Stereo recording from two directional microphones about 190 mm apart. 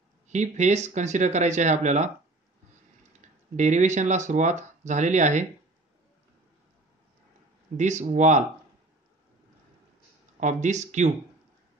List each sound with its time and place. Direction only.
0.3 s speech: 40° right (ahead or behind)
3.2 s speech: 40° right (ahead or behind)
7.7 s speech: 40° right (ahead or behind)
10.4 s speech: 40° right (ahead or behind)